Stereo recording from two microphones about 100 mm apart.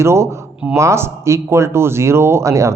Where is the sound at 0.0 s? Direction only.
25° right (ahead or behind).